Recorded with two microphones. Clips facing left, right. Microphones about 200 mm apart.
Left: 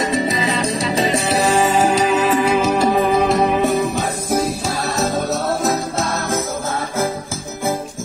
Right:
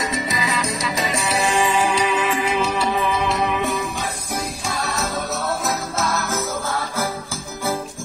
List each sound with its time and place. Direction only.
0.1 s music: 30° left (ahead or behind)
5.9 s music: 30° left (ahead or behind)